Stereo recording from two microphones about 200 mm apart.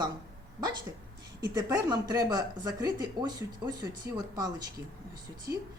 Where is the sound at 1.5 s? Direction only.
20° right (ahead or behind).